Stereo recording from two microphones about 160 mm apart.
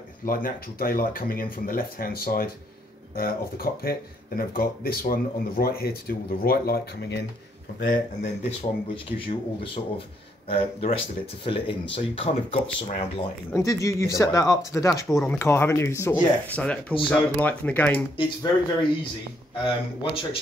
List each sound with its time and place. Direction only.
0.2 s speech: 65° left (ahead or behind); by 7.2 s 85° left
7.8 s speech: 55° left (ahead or behind)
8.5 s speech: 35° left (ahead or behind)
13.7 s speech: 20° left (ahead or behind)
18.1 s speech: 30° left (ahead or behind)
19.6 s speech: 30° left (ahead or behind)